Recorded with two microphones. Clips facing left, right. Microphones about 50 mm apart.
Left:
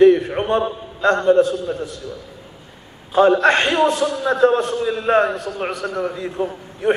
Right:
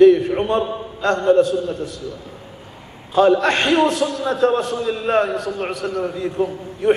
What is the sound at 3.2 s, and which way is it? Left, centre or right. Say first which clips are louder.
A man's voice: left 1 dB; left.